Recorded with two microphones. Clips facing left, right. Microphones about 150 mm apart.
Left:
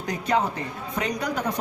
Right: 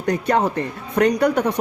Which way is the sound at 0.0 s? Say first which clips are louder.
Right 5 dB; 65° right (ahead or behind).